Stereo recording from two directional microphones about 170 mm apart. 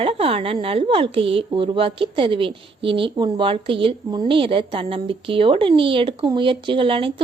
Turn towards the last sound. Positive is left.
turn(degrees=-30)  # may be behind; listen again after turning